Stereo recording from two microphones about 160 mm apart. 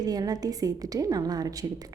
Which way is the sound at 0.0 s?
25° right (ahead or behind).